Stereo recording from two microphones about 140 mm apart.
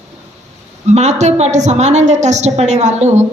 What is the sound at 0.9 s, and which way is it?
A woman's voice, 55° right (ahead or behind).